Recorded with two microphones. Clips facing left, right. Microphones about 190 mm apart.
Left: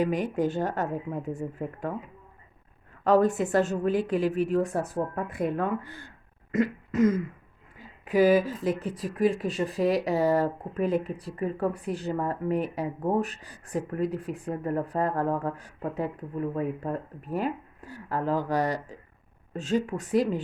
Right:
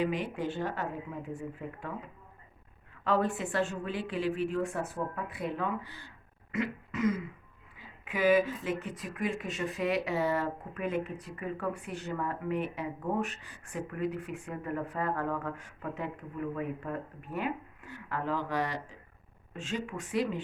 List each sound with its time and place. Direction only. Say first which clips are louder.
0.0 s a woman's voice: left 6 dB; 45° left (ahead or behind)
3.0 s a woman's voice: left 8 dB; 40° left (ahead or behind)